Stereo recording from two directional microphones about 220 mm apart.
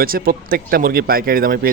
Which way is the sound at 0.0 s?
40° right (ahead or behind).